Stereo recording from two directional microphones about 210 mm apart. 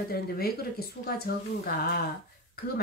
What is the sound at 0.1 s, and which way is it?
Speech, 50° left (ahead or behind).